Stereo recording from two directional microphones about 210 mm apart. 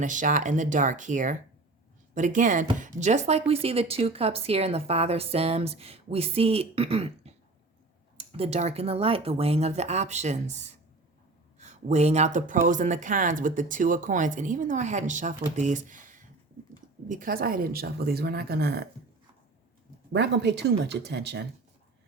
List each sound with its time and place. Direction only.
0.0 s a woman's voice: 35° right (ahead or behind)
20.1 s a woman's voice: 55° right (ahead or behind)